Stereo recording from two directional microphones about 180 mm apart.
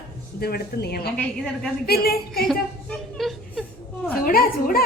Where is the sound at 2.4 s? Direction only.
Centre (ahead or behind).